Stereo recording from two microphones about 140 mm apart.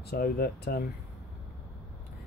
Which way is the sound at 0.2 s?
90° left.